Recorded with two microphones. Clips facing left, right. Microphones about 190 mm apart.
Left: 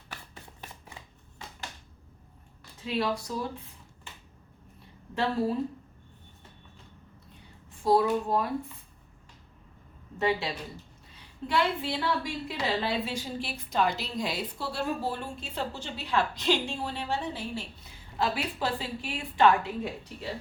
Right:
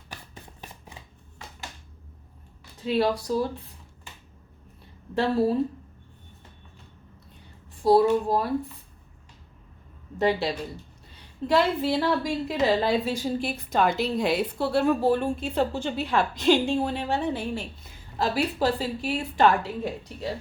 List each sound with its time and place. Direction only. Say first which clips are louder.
2.8 s a woman's voice: right 6 dB; 35° right (ahead or behind)
5.1 s a woman's voice: right 5 dB; 35° right (ahead or behind)
7.8 s a woman's voice: right 5 dB; 35° right (ahead or behind)
10.2 s a woman's voice: right 5 dB; 40° right (ahead or behind); by 17.6 s 55° right (ahead or behind)
18.2 s a woman's voice: right 5 dB; 40° right (ahead or behind)